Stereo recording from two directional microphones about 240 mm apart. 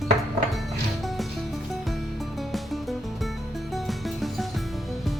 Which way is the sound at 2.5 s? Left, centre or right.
Centre.